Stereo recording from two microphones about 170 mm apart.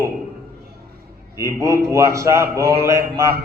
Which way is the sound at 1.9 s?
15° right (ahead or behind).